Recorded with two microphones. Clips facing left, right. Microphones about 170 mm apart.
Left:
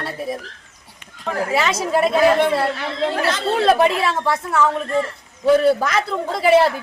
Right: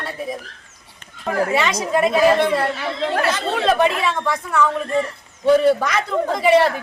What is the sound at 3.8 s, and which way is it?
Speech, 30° left (ahead or behind).